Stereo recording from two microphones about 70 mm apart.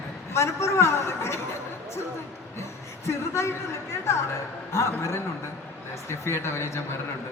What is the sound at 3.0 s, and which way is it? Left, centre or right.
A man's voice, left.